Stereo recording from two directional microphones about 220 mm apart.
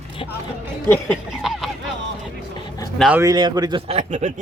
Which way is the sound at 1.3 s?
Centre (ahead or behind).